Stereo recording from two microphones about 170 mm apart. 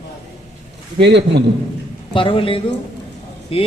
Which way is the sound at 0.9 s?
90° right.